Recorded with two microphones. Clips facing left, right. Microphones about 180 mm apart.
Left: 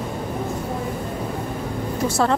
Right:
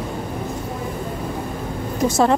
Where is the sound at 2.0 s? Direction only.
20° right (ahead or behind).